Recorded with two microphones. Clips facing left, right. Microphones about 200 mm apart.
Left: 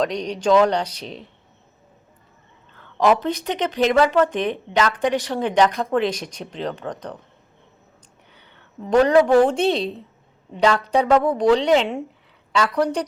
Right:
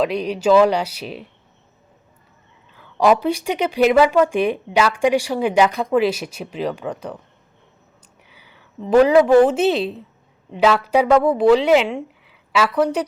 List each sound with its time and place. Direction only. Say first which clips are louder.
0.0 s speech: right 3 dB; 5° right (ahead or behind)
2.7 s speech: right 2 dB; 10° right (ahead or behind)
8.3 s a woman's voice: right 1 dB; 5° right (ahead or behind)